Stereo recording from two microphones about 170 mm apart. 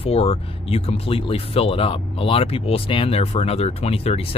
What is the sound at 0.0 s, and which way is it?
Speech, 35° left (ahead or behind).